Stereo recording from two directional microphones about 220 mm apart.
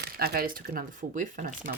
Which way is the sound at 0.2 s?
40° right (ahead or behind).